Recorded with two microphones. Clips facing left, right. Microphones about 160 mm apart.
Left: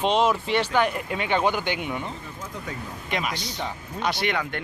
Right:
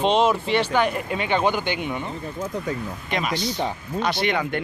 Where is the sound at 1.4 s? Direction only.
15° right (ahead or behind).